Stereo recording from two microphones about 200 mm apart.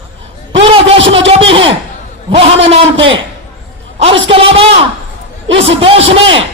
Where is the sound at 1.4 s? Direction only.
25° right (ahead or behind).